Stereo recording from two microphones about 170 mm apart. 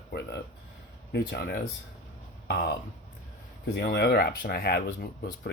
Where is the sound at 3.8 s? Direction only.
75° left (ahead or behind).